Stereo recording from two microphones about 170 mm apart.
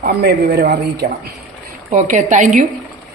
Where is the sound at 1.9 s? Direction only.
50° right (ahead or behind).